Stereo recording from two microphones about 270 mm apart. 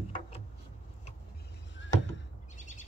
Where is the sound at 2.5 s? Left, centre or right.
Left.